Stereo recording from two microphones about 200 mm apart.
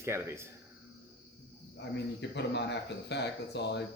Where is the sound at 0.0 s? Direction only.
15° right (ahead or behind).